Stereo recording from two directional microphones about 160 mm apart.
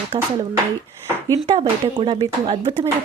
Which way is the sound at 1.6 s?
30° right (ahead or behind).